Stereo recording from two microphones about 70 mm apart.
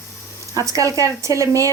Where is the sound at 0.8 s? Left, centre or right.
Right.